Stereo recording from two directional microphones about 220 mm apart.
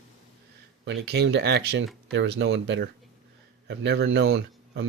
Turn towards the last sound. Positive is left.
turn(degrees=-65)  # may be behind; listen again after turning